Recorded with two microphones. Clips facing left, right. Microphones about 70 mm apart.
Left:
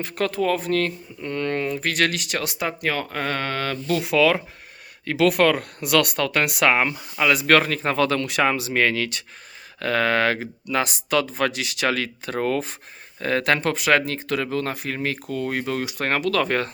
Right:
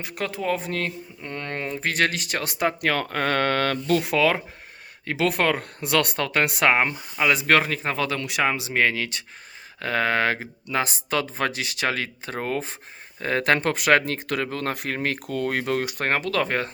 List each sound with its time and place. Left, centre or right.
0.0 s speech: centre; by 16.0 s right
16.0 s speech: right